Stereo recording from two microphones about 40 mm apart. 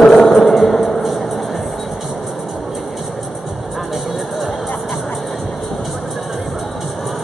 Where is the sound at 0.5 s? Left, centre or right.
Centre.